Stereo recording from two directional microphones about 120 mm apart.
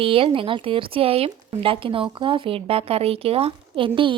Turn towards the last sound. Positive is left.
turn(degrees=-45)  # may be behind; listen again after turning